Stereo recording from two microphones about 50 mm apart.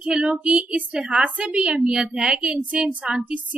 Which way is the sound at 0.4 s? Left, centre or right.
Right.